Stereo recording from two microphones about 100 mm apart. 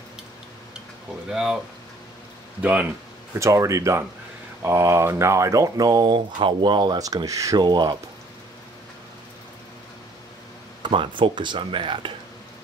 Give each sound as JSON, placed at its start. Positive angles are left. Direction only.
{"t": 1.3, "sound": "speech", "side_deg": -5}
{"t": 2.6, "sound": "speech", "side_deg": -15}
{"t": 3.3, "sound": "speech", "side_deg": -30}
{"t": 6.1, "sound": "speech", "side_deg": -55}
{"t": 7.6, "sound": "speech", "side_deg": -45}
{"t": 10.8, "sound": "speech", "side_deg": -55}